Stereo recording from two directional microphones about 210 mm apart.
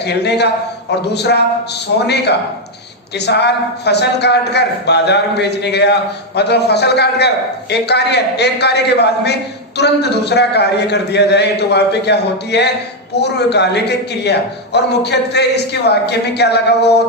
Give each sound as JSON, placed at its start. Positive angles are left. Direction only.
{"t": 0.0, "sound": "a man's voice", "side_deg": 55}